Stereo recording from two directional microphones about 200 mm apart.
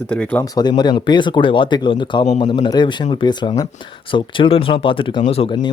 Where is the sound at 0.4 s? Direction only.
20° left (ahead or behind).